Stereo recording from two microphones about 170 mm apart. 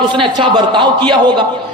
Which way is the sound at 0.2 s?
25° right (ahead or behind).